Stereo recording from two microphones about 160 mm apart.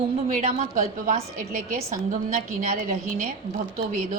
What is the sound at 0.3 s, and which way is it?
A woman's voice, 50° right (ahead or behind).